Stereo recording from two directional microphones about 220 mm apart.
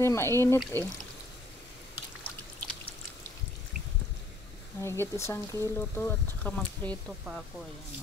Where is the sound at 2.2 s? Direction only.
5° left (ahead or behind).